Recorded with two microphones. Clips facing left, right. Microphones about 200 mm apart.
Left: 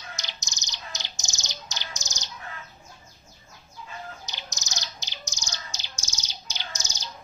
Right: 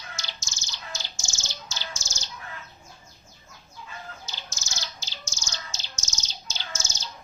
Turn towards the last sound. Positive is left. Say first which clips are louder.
# right 1 dB
turn(degrees=15)  # may be behind; listen again after turning